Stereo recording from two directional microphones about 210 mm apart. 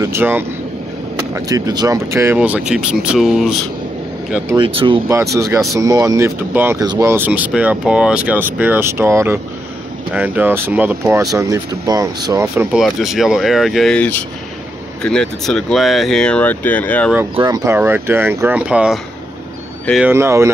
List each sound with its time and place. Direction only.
0.0 s speech: 10° right (ahead or behind)
4.6 s speech: 25° right (ahead or behind)
5.0 s speech: 15° right (ahead or behind)
12.8 s speech: centre (ahead or behind)
17.1 s speech: 10° right (ahead or behind)